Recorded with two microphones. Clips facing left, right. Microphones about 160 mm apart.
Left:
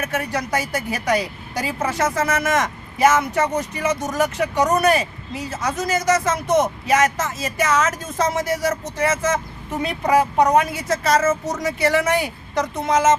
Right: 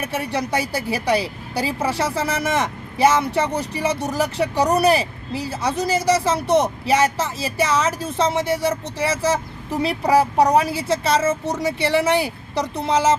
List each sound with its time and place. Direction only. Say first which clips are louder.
0.0 s speech: even; 30° right (ahead or behind)